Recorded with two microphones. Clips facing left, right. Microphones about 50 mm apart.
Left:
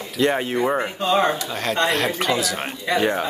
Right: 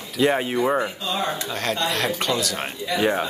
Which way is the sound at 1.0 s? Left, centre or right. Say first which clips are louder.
Left 7 dB; left.